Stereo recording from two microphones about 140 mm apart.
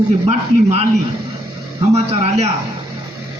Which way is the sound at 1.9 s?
50° right (ahead or behind).